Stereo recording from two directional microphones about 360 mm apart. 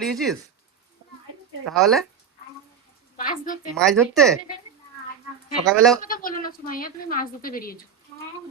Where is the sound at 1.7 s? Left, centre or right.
Centre.